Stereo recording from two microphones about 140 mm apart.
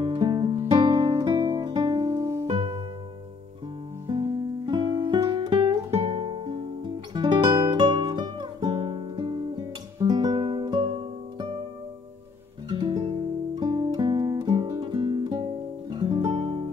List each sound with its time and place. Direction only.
0.0 s music: 35° right (ahead or behind)
4.2 s guitar: 30° right (ahead or behind)
5.9 s music: 45° right (ahead or behind)
12.6 s guitar: 35° right (ahead or behind)